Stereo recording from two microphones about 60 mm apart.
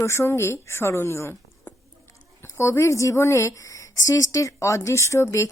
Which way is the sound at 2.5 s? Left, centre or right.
Left.